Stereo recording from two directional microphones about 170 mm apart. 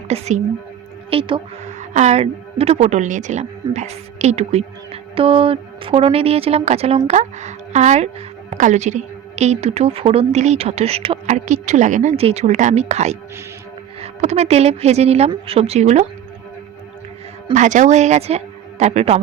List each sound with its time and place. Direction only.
0.1 s a woman's voice: 40° right (ahead or behind)
1.1 s a woman's voice: 30° right (ahead or behind)
1.9 s a woman's voice: 40° right (ahead or behind)
17.5 s a woman's voice: 45° right (ahead or behind)